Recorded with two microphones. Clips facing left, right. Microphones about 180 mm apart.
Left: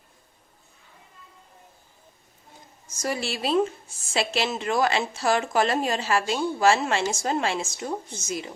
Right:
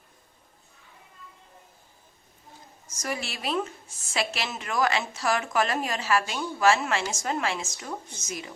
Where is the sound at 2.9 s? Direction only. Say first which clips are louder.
Left 5 dB; 30° left (ahead or behind).